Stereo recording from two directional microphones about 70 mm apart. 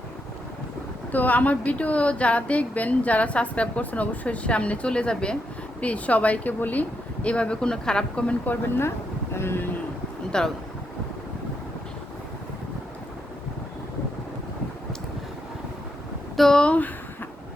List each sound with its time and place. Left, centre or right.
1.1 s a woman's voice: left
8.4 s speech: left
10.3 s speech: centre
16.4 s speech: centre